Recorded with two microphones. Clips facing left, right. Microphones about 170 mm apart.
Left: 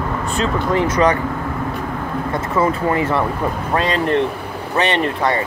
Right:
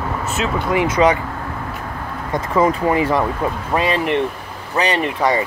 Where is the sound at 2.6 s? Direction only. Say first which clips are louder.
Right 2 dB; 15° right (ahead or behind).